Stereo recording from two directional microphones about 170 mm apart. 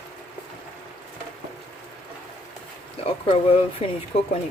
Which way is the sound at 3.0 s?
35° left (ahead or behind).